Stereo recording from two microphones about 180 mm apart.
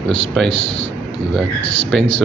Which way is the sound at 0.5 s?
35° left (ahead or behind).